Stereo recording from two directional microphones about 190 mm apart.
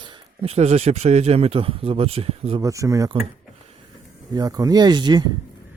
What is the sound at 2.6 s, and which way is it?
Speech, 15° right (ahead or behind).